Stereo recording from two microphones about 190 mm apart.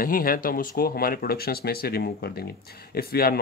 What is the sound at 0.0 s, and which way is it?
Speech, 50° left (ahead or behind).